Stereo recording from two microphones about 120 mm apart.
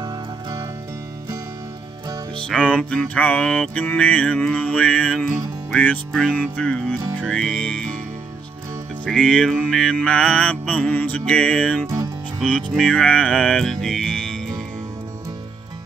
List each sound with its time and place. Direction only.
0.0 s music: 30° right (ahead or behind)
2.3 s music: 10° left (ahead or behind)
9.0 s music: 5° left (ahead or behind)